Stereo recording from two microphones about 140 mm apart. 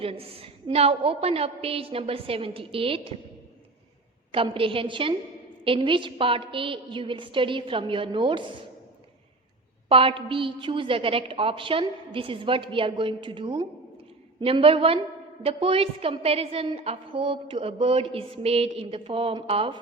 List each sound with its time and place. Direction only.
0.0 s a woman's voice: 45° right (ahead or behind)
4.5 s a woman's voice: 40° right (ahead or behind)
9.9 s a woman's voice: 40° right (ahead or behind)